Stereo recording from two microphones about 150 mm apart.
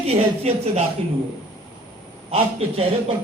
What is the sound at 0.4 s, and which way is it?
Speech, 45° right (ahead or behind).